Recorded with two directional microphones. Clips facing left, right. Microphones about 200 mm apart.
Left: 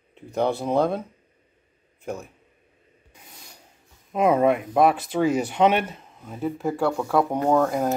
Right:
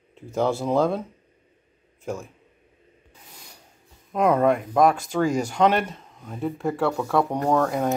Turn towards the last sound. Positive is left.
turn(degrees=0)  # may be behind; listen again after turning